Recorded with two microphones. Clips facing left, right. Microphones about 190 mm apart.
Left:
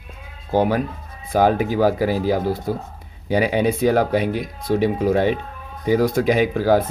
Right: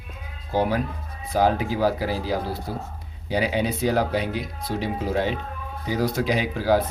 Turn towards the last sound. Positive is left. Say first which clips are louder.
# left 5 dB
turn(degrees=50)  # may be behind; listen again after turning